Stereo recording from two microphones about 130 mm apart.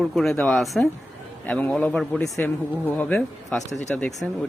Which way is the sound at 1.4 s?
10° left (ahead or behind).